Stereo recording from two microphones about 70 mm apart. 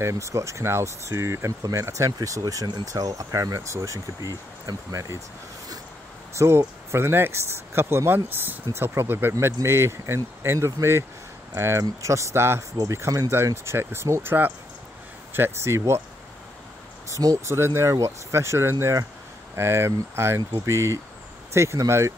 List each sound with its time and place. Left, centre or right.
0.0 s speech: right
6.3 s speech: right
9.3 s speech: right
13.7 s speech: right
15.3 s speech: right
17.1 s speech: right
17.6 s speech: right